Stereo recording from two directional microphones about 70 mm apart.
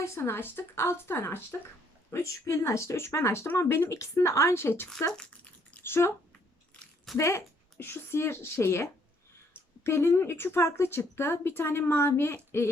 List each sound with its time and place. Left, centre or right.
0.0 s a woman's voice: left
2.2 s speech: left
7.2 s a woman's voice: left